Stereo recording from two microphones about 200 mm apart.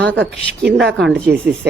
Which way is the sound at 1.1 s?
5° left (ahead or behind).